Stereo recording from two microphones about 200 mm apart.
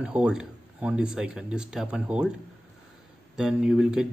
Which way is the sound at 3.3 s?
5° right (ahead or behind).